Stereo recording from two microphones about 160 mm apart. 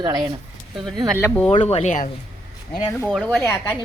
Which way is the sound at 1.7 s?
45° left (ahead or behind).